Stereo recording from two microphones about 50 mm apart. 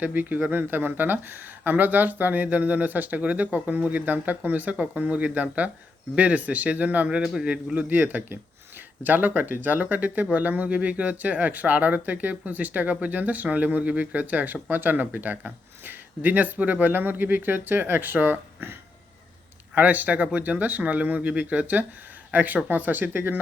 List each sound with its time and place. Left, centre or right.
0.0 s a man's voice: right
7.9 s speech: right